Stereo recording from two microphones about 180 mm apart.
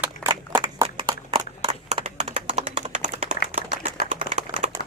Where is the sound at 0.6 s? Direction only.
30° right (ahead or behind).